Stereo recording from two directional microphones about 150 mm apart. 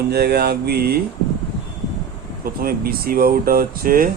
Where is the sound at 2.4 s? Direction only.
75° right (ahead or behind).